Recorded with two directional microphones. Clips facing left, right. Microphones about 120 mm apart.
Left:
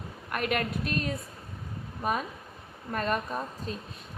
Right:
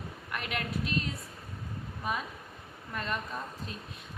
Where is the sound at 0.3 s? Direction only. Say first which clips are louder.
Left 7 dB; 50° left (ahead or behind).